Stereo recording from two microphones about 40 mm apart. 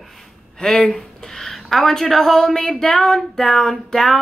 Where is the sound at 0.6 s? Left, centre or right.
Left.